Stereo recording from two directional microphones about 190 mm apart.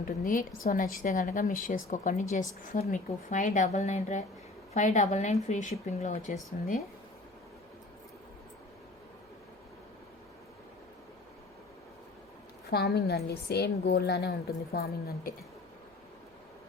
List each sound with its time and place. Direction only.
0.3 s a woman's voice: 45° left (ahead or behind)
12.7 s a woman's voice: 55° left (ahead or behind)